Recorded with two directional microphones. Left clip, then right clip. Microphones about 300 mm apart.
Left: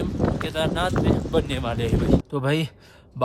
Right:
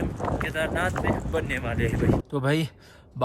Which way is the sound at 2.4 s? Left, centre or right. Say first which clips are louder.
Left 1 dB; centre.